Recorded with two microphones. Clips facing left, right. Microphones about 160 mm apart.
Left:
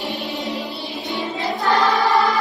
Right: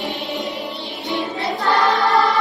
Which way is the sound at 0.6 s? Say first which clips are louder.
Even; 20° right (ahead or behind).